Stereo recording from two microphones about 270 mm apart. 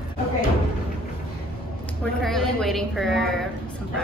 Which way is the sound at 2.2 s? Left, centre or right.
Centre.